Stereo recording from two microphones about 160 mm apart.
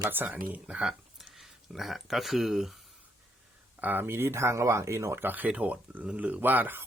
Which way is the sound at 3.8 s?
10° right (ahead or behind).